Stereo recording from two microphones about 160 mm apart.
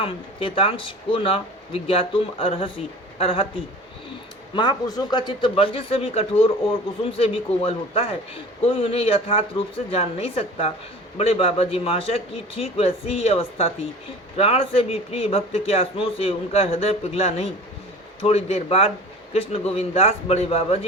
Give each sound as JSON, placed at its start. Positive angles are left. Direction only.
{"t": 0.0, "sound": "speech", "side_deg": 35}